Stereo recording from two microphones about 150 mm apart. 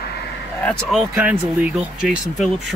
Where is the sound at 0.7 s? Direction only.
Centre (ahead or behind).